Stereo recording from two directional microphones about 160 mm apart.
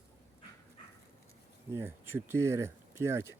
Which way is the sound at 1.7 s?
15° right (ahead or behind).